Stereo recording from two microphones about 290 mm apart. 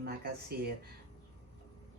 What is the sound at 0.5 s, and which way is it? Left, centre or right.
Speech, right.